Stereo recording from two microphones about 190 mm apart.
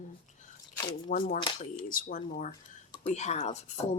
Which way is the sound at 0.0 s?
40° left (ahead or behind).